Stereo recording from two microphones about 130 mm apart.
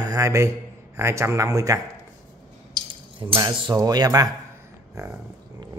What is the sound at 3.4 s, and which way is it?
Speech, 40° right (ahead or behind).